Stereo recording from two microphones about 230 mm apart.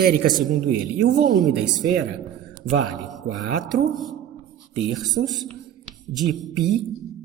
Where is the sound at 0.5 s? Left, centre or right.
Right.